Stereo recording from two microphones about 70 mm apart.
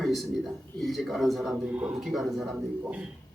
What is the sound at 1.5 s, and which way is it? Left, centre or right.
Speech, right.